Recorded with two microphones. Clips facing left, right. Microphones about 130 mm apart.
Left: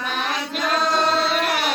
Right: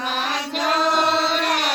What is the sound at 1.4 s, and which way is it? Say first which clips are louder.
Carnatic music: even; 5° left (ahead or behind).